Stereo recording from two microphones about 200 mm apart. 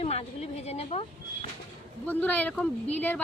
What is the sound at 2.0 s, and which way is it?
Speech, 10° left (ahead or behind).